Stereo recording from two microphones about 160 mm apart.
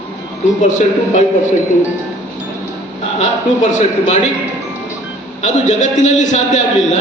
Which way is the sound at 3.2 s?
50° left (ahead or behind).